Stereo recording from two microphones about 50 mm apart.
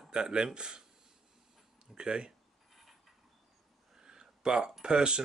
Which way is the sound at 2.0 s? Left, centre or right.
Centre.